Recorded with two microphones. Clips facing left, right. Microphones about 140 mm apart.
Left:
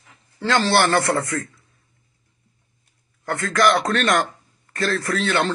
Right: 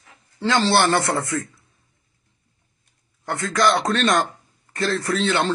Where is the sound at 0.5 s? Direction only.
20° right (ahead or behind).